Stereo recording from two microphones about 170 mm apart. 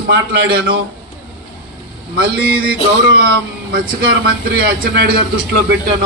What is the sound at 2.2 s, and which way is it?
A man's voice, 65° right (ahead or behind).